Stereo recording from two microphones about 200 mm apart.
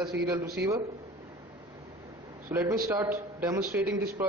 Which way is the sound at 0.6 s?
60° right (ahead or behind).